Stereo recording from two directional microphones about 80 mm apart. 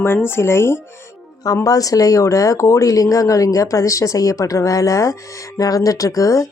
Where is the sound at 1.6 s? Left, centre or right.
Left.